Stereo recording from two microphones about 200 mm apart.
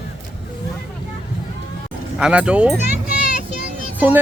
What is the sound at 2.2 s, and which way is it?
Speech, 5° right (ahead or behind).